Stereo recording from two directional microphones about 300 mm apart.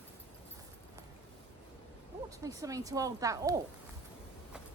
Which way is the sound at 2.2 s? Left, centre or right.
Centre.